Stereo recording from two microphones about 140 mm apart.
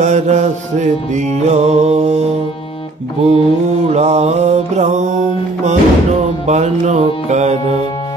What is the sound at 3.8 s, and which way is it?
Music, 50° right (ahead or behind).